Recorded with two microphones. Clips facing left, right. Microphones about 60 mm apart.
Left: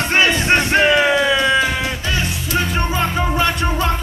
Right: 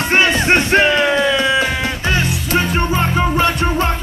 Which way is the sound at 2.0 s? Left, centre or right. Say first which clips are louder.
Right 4 dB; right.